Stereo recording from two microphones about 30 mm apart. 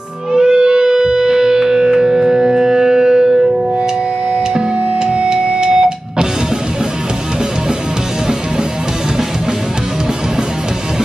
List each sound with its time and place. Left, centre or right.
0.4 s music: right
4.6 s music: right